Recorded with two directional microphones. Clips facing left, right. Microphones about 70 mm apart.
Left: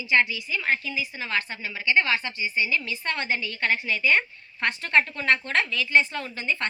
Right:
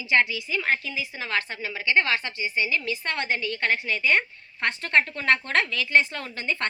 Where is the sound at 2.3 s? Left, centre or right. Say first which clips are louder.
Even; right.